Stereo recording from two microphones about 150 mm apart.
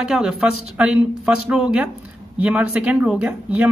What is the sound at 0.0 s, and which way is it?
Speech, 5° right (ahead or behind).